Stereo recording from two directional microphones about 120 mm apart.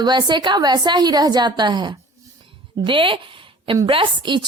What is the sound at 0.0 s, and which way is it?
A woman's voice, 35° right (ahead or behind).